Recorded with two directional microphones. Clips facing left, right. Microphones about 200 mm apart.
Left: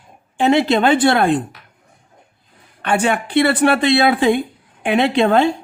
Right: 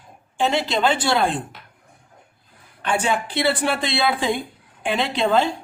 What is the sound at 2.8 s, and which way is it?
Speech, 65° left (ahead or behind).